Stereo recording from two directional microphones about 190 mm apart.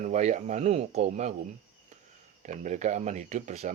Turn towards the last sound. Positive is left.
turn(degrees=-40)  # may be behind; listen again after turning